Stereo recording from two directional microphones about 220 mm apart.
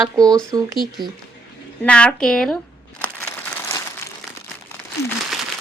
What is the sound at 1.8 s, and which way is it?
Speech, 5° left (ahead or behind).